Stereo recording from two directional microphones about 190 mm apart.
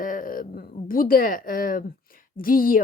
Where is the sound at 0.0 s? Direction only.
45° left (ahead or behind).